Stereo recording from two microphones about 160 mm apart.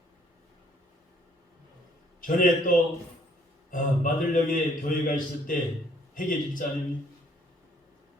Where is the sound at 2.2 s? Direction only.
60° left (ahead or behind).